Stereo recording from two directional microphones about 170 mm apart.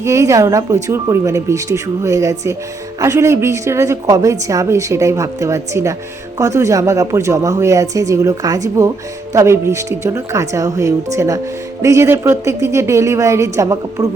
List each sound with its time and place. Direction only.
0.0 s a woman's voice: 20° right (ahead or behind)